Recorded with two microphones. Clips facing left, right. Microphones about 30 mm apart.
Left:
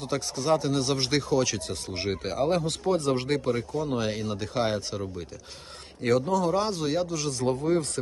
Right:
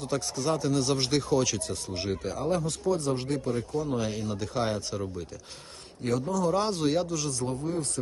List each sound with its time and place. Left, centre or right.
0.1 s a man's voice: left
0.9 s speech: centre
1.5 s a man's voice: left
2.2 s speech: left
3.5 s speech: left
3.8 s speech: left
4.4 s a man's voice: left
6.0 s speech: left
6.5 s speech: centre
7.4 s speech: left